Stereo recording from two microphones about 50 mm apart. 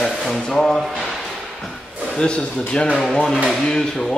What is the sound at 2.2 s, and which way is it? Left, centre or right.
Speech, left.